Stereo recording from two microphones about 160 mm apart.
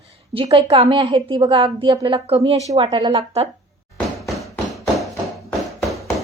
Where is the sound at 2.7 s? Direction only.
25° right (ahead or behind).